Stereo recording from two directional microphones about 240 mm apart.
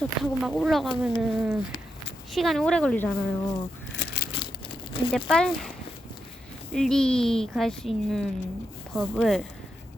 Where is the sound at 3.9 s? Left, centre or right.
Left.